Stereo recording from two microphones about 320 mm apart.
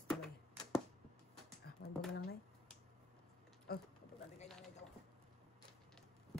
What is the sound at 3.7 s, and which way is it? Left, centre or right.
Speech, left.